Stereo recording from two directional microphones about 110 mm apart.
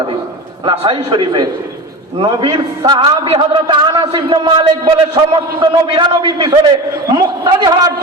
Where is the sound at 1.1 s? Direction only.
45° right (ahead or behind).